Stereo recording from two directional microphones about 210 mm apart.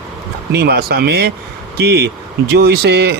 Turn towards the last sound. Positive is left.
turn(degrees=-50)  # may be behind; listen again after turning